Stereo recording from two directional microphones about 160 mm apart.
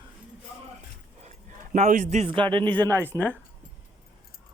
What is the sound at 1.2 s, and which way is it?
A man's voice, 45° right (ahead or behind).